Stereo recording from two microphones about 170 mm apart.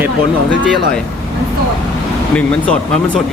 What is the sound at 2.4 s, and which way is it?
Speech, 10° left (ahead or behind).